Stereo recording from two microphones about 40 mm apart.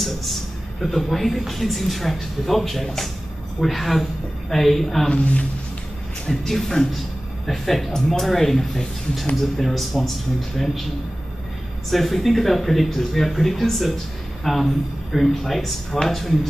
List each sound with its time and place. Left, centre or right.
0.0 s speech: centre
5.1 s speech: left
6.2 s speech: centre
11.9 s speech: centre